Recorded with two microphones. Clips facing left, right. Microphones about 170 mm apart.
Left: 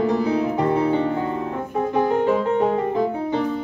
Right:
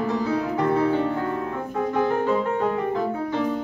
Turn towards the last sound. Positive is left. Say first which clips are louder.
# left 3 dB
turn(degrees=20)  # may be behind; listen again after turning